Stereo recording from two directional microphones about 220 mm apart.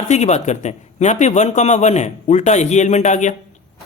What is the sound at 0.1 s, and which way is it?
A man's voice, 30° left (ahead or behind).